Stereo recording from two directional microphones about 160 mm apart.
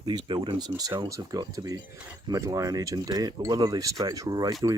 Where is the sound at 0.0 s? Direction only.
25° right (ahead or behind).